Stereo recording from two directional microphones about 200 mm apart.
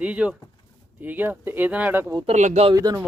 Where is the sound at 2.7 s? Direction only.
20° right (ahead or behind).